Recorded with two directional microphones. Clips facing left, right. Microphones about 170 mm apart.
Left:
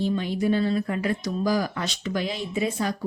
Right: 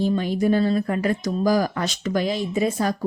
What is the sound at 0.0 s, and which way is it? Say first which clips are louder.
A woman's voice: right 3 dB; 45° right (ahead or behind).